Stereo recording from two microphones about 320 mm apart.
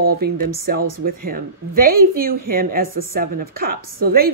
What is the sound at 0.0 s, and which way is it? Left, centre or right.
Speech, right.